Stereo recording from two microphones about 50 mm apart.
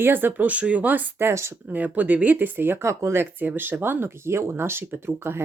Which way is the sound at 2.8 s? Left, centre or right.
Right.